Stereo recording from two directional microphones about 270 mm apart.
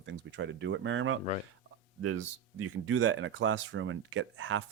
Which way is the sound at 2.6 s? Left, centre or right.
Right.